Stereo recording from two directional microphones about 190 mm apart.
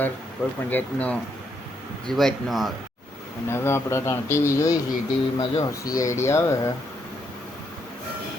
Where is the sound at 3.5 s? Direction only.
15° left (ahead or behind).